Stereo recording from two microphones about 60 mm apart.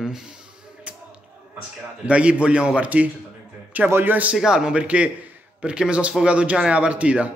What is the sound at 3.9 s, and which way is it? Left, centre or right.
Speech, right.